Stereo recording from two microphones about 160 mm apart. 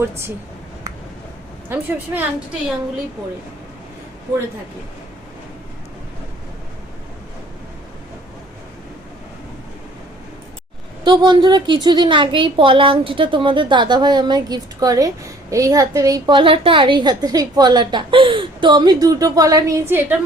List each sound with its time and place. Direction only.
1.7 s a woman's voice: 10° right (ahead or behind)
11.0 s a woman's voice: 25° right (ahead or behind)